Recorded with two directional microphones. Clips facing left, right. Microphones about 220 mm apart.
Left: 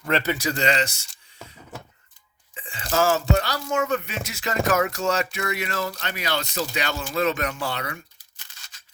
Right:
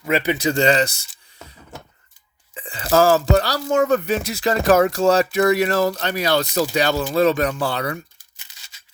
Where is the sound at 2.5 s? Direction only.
35° right (ahead or behind).